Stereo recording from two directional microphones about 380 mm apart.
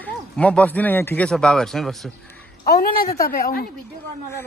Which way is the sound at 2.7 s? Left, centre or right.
Left.